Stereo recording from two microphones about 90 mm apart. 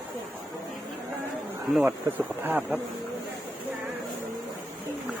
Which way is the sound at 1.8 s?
20° right (ahead or behind).